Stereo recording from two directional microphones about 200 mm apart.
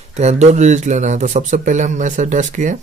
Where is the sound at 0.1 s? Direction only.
35° right (ahead or behind).